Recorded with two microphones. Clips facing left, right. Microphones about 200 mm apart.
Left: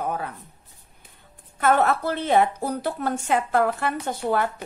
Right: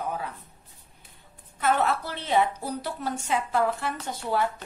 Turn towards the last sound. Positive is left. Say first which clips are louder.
# left 4 dB
turn(degrees=55)  # may be behind; listen again after turning